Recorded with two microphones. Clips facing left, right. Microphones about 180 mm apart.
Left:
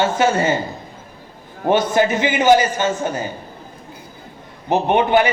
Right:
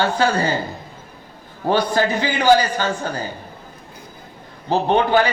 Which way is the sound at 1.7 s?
20° left (ahead or behind).